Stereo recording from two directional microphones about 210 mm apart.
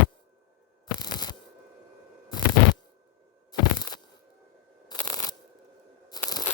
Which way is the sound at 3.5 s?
20° left (ahead or behind).